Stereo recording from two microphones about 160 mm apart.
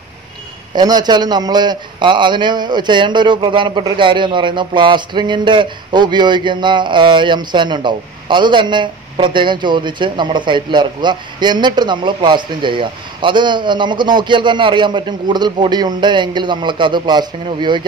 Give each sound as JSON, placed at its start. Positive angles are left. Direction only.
{"t": 0.7, "sound": "a man's voice", "side_deg": -25}